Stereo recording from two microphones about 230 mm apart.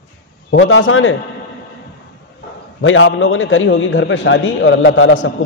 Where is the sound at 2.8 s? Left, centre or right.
Left.